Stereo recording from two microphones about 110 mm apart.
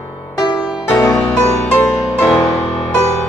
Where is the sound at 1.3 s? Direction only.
5° left (ahead or behind).